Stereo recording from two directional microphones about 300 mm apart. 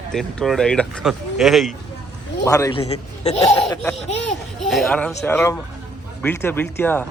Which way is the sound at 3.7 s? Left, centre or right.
Centre.